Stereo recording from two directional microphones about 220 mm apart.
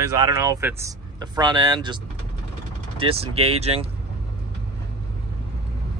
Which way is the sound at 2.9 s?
25° right (ahead or behind).